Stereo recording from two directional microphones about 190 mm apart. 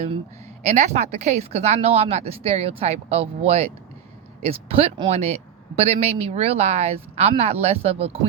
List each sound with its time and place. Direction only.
0.6 s speech: 35° right (ahead or behind)